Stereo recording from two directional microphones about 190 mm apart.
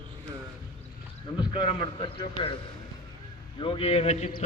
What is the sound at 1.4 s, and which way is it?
A man's voice, 25° left (ahead or behind).